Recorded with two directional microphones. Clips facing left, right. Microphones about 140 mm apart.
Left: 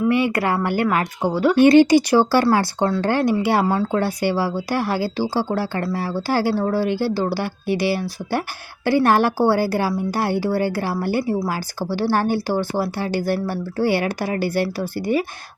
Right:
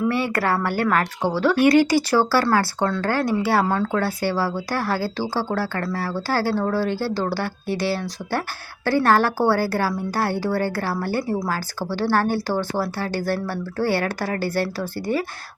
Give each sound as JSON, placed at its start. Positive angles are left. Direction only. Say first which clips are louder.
{"t": 0.1, "sound": "a woman's voice", "louder": "left 3 dB", "side_deg": 15}
{"t": 1.5, "sound": "a woman's voice", "louder": "left 6 dB", "side_deg": 25}